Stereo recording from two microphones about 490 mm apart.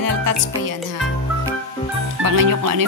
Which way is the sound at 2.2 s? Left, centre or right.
Right.